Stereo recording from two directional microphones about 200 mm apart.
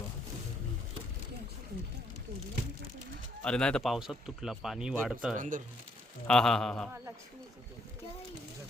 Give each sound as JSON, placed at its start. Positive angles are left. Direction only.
{"t": 3.4, "sound": "speech", "side_deg": 5}
{"t": 5.4, "sound": "speech", "side_deg": -40}
{"t": 6.2, "sound": "speech", "side_deg": 5}